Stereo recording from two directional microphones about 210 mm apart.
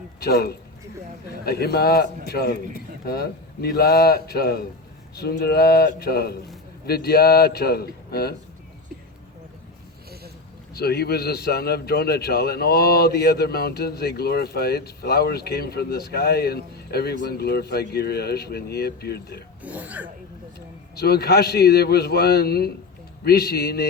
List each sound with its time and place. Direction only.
0.2 s a man's voice: 50° left (ahead or behind)
10.8 s a man's voice: 50° left (ahead or behind)
19.6 s speech: 5° right (ahead or behind)
20.9 s a man's voice: 50° left (ahead or behind)